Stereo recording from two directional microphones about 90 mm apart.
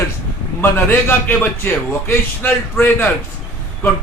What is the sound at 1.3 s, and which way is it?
A man's voice, 20° left (ahead or behind).